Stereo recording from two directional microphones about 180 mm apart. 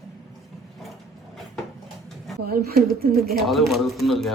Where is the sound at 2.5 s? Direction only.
60° right (ahead or behind).